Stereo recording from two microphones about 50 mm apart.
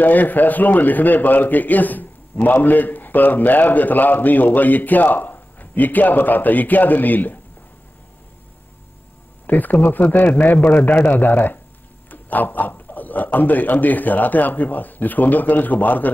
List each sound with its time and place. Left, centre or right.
0.0 s a man's voice: left
9.5 s a man's voice: left